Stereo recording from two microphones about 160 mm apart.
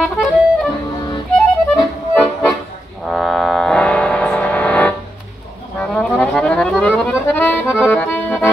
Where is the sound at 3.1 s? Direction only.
Centre (ahead or behind).